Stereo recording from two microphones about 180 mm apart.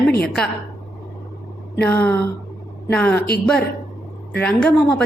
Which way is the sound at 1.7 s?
10° left (ahead or behind).